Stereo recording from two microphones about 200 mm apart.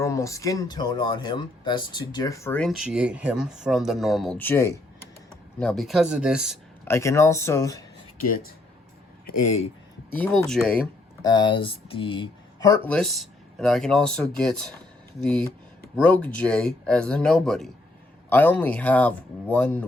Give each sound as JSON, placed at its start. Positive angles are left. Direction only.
{"t": 0.0, "sound": "speech", "side_deg": 15}
{"t": 6.8, "sound": "speech", "side_deg": 15}
{"t": 9.2, "sound": "speech", "side_deg": 35}
{"t": 10.1, "sound": "speech", "side_deg": 5}
{"t": 11.2, "sound": "speech", "side_deg": 20}